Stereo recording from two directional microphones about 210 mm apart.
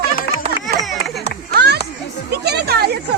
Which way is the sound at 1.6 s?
50° right (ahead or behind).